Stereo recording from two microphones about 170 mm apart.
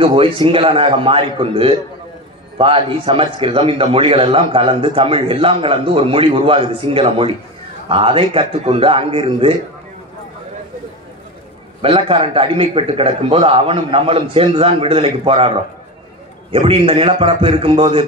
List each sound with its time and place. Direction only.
0.0 s a man's voice: 30° right (ahead or behind)
11.8 s a man's voice: 30° right (ahead or behind)